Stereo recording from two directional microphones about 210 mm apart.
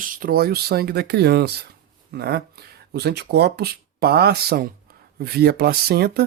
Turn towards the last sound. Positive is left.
turn(degrees=-50)  # may be behind; listen again after turning